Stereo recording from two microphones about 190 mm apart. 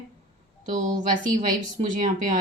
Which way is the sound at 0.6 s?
40° right (ahead or behind).